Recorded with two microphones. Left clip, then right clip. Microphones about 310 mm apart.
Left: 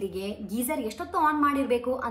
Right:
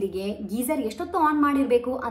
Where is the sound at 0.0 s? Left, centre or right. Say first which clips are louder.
Right 4 dB; centre.